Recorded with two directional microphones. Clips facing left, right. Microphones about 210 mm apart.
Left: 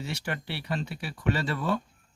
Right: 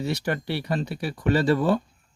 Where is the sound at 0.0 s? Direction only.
40° right (ahead or behind).